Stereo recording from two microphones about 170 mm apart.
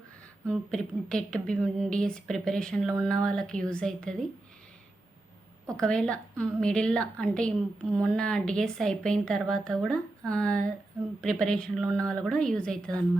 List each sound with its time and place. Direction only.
0.4 s speech: 5° left (ahead or behind)
5.7 s speech: 5° left (ahead or behind)